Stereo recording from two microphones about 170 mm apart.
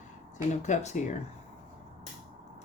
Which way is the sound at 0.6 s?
40° left (ahead or behind).